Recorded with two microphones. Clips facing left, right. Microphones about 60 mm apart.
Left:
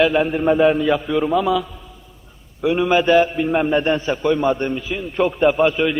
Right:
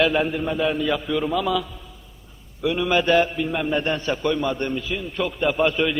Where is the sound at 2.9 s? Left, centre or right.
Centre.